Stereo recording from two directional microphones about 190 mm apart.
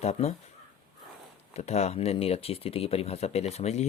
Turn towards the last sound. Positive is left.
turn(degrees=35)  # may be behind; listen again after turning